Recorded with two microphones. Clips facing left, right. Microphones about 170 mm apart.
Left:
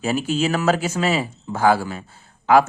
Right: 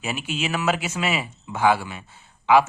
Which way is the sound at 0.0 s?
40° left (ahead or behind).